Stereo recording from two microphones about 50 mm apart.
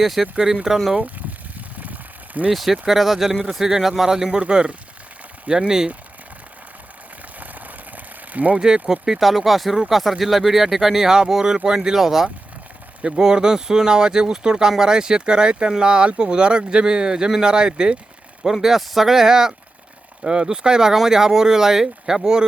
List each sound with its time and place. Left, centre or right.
0.0 s speech: centre
1.5 s vehicle: right
2.5 s speech: centre
4.4 s speech: right
7.3 s a sound: right
8.5 s speech: centre
18.5 s speech: centre